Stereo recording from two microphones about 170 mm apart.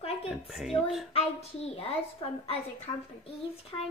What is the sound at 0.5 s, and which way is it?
Speech, 5° right (ahead or behind).